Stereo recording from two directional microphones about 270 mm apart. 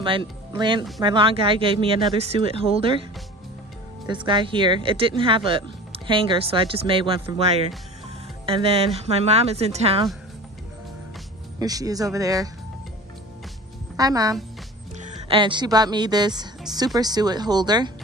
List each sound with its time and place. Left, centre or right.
0.0 s speech: centre
4.1 s speech: centre
8.5 s speech: right
11.6 s speech: centre
13.9 s speech: centre